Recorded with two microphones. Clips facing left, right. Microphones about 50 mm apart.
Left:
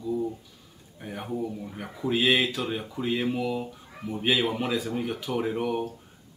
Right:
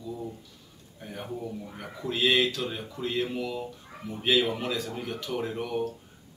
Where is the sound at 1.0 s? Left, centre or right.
Centre.